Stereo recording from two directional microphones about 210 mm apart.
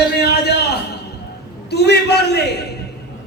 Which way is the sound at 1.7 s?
50° left (ahead or behind).